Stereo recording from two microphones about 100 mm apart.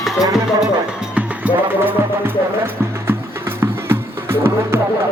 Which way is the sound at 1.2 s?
15° right (ahead or behind).